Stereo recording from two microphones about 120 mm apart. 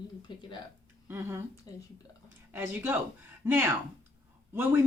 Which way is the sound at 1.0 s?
20° right (ahead or behind).